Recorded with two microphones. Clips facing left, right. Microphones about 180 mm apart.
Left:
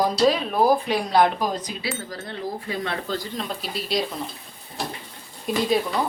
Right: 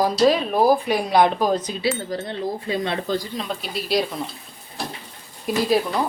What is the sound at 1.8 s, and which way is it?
Speech, 25° right (ahead or behind).